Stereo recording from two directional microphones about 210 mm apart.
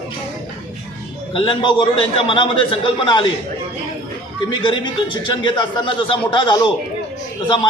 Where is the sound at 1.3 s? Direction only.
25° left (ahead or behind).